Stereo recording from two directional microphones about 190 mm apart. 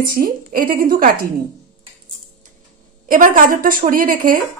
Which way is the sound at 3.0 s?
45° right (ahead or behind).